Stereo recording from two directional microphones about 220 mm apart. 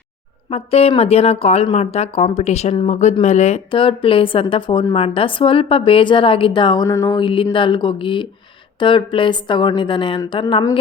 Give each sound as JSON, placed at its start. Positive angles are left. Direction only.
{"t": 0.5, "sound": "speech", "side_deg": 25}